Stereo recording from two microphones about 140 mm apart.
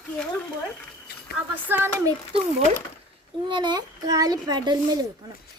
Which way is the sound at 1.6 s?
15° right (ahead or behind).